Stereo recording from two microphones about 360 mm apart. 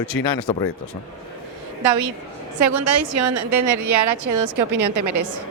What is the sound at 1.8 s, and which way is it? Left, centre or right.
Speech, right.